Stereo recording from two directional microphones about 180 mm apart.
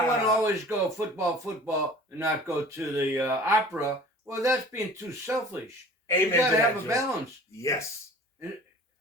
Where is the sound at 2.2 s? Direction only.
15° right (ahead or behind).